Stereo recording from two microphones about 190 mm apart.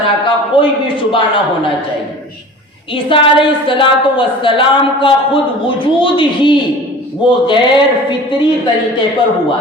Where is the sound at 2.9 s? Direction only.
25° left (ahead or behind).